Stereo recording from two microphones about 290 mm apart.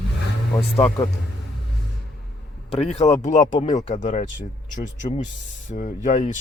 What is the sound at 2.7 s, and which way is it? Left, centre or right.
Speech, left.